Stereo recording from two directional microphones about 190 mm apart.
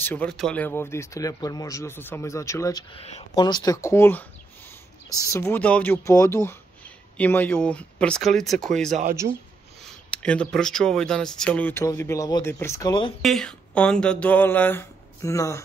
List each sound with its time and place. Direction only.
0.0 s speech: 10° left (ahead or behind)
2.9 s speech: 30° left (ahead or behind)
13.2 s speech: centre (ahead or behind)